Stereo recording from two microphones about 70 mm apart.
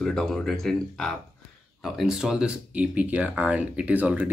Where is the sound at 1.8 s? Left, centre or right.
Centre.